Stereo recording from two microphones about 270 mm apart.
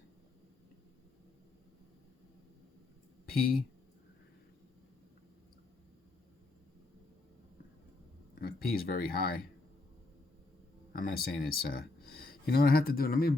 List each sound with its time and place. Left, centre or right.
3.2 s speech: left
8.4 s speech: left
10.9 s speech: left